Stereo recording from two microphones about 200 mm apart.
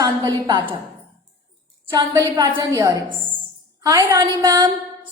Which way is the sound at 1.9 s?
20° right (ahead or behind).